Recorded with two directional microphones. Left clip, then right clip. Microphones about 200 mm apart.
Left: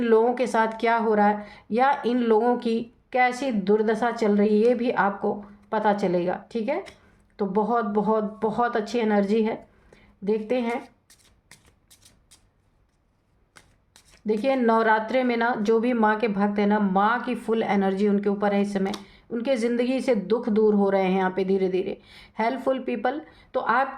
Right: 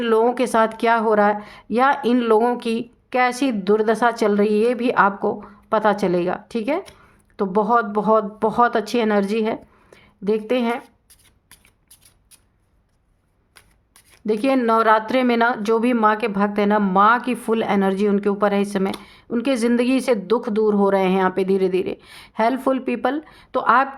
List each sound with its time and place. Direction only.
0.0 s speech: 40° right (ahead or behind)
14.2 s speech: 40° right (ahead or behind)